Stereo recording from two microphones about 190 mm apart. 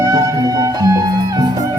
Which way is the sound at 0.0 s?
20° right (ahead or behind).